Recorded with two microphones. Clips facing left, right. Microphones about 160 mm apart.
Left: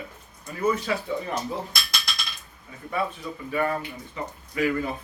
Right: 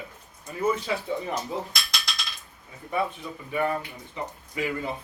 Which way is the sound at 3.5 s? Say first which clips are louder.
Left 1 dB; 20° right (ahead or behind).